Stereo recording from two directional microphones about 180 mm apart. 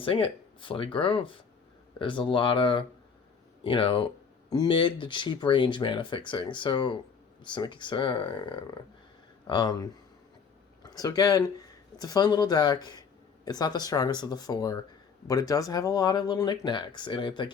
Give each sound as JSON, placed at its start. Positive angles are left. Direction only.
{"t": 0.0, "sound": "speech", "side_deg": 30}